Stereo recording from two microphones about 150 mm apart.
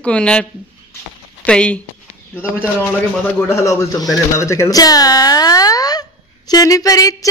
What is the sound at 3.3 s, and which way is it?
Speech, 20° left (ahead or behind).